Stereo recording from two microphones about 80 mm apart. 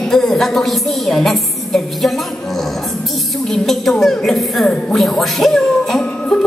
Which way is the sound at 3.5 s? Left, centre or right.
Centre.